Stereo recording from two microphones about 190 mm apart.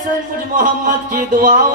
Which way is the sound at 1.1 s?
45° right (ahead or behind).